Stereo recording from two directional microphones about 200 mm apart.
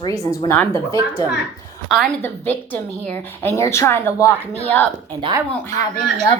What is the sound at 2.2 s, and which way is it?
A woman's voice, 10° left (ahead or behind).